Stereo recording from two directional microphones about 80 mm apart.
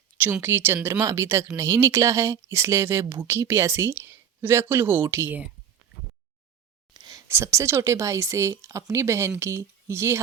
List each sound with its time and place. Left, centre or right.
0.4 s speech: right
6.9 s a sound: right
7.3 s speech: right